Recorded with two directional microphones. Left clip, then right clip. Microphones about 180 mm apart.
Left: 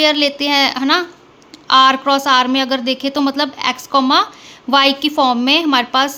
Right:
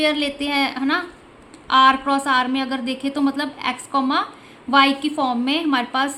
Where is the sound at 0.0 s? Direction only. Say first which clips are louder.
Left 7 dB; 35° left (ahead or behind).